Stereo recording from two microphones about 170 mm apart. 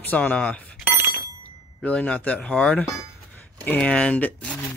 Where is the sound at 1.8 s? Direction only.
5° left (ahead or behind).